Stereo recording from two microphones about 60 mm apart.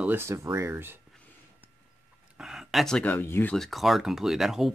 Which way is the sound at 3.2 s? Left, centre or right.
Left.